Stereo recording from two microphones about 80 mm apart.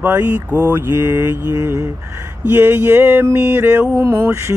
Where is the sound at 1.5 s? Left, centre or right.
Right.